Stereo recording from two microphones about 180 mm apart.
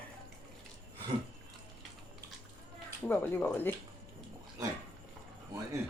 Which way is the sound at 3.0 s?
10° left (ahead or behind).